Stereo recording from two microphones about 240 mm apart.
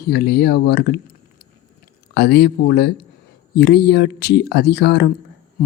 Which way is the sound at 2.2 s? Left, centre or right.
Left.